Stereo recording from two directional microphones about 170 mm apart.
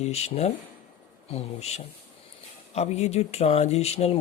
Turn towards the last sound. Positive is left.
turn(degrees=40)  # may be behind; listen again after turning